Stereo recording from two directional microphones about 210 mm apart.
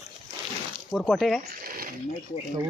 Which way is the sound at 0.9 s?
Centre (ahead or behind).